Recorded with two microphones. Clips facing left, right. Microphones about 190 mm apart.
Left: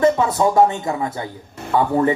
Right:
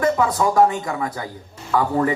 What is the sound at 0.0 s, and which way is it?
A man's voice, 25° left (ahead or behind).